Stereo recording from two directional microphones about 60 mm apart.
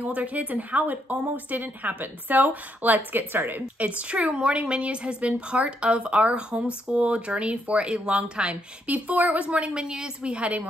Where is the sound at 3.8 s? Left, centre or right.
Right.